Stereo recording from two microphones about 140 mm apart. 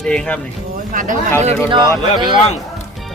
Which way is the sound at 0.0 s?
5° left (ahead or behind).